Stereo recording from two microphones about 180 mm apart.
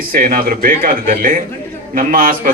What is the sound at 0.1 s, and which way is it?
Speech, 50° right (ahead or behind).